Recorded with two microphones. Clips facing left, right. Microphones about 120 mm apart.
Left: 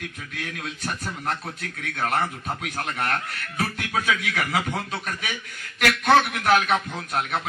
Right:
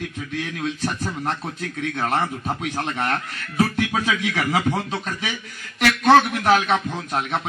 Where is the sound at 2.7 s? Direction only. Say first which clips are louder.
Right 1 dB; 25° right (ahead or behind).